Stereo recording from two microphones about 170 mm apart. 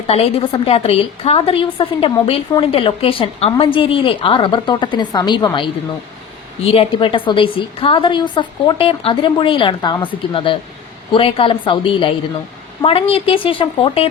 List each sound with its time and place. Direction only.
0.1 s a woman's voice: 35° left (ahead or behind)